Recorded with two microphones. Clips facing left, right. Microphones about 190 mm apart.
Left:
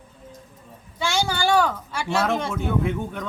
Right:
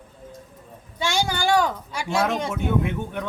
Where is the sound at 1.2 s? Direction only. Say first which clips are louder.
Left 1 dB; 15° right (ahead or behind).